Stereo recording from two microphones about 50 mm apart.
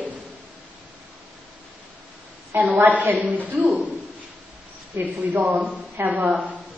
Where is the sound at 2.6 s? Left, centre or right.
Right.